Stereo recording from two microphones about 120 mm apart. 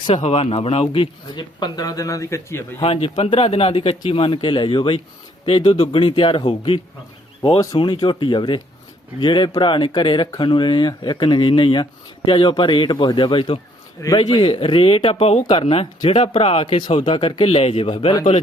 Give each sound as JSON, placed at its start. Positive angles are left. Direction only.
{"t": 0.0, "sound": "a man's voice", "side_deg": 45}
{"t": 1.3, "sound": "a man's voice", "side_deg": 40}
{"t": 2.8, "sound": "a man's voice", "side_deg": 50}